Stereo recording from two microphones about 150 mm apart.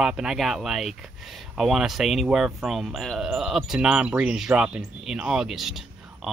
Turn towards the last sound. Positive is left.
turn(degrees=0)  # may be behind; listen again after turning